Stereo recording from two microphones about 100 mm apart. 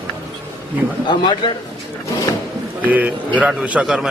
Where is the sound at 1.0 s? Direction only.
50° left (ahead or behind).